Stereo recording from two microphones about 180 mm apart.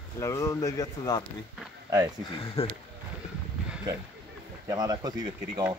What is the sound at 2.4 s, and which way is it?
Speech, 35° left (ahead or behind).